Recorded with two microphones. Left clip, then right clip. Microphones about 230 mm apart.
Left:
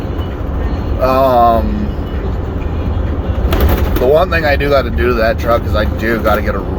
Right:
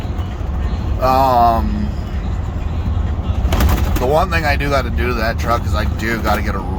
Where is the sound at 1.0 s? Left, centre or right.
Right.